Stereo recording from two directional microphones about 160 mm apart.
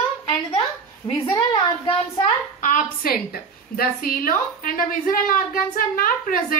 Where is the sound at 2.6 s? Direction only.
55° left (ahead or behind).